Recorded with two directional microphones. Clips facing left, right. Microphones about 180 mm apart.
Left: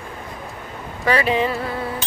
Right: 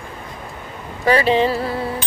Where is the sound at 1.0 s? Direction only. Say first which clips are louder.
Right 4 dB; 30° right (ahead or behind).